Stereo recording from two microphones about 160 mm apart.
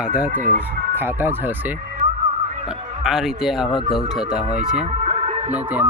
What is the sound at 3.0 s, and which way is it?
A man's voice, 5° right (ahead or behind).